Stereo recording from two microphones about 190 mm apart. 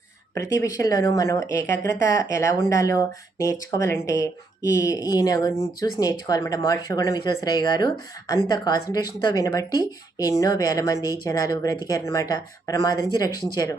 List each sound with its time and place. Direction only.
0.3 s speech: 15° left (ahead or behind)